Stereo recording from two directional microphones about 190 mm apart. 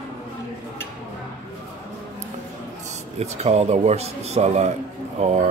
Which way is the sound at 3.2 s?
35° right (ahead or behind).